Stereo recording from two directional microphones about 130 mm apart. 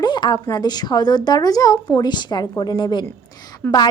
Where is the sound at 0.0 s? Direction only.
35° left (ahead or behind).